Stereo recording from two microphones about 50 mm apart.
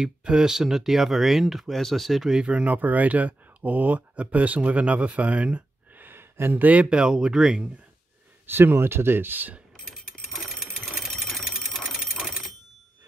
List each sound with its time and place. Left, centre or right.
0.0 s speech: centre
2.3 s speech: right
5.9 s a sound: right
6.5 s speech: right
6.9 s speech: centre
8.5 s speech: right
10.3 s sewing machine: centre
11.0 s a sound: centre